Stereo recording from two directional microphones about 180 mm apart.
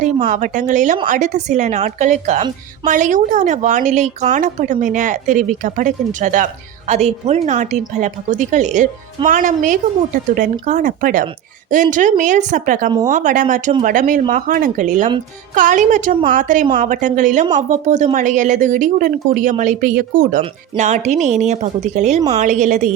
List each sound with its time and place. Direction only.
0.0 s speech: 45° right (ahead or behind)